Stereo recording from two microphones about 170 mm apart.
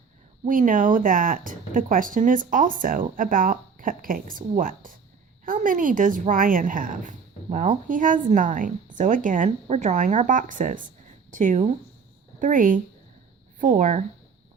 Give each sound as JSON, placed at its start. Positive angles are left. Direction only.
{"t": 0.4, "sound": "speech", "side_deg": -50}